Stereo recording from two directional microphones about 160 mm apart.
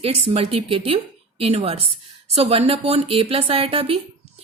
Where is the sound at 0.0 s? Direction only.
35° right (ahead or behind).